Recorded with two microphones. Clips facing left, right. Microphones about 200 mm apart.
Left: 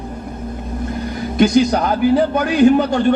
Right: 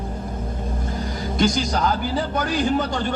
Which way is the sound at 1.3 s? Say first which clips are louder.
Left 8 dB; 60° left (ahead or behind).